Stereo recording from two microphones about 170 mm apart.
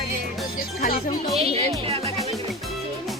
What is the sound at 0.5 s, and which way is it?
Speech, 60° left (ahead or behind).